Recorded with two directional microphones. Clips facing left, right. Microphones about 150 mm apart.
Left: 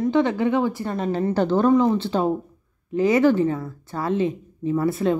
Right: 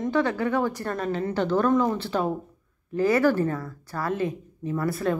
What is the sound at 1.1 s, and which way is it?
Speech, 35° left (ahead or behind).